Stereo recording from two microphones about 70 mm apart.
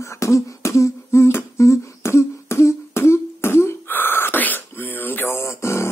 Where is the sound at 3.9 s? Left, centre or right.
Left.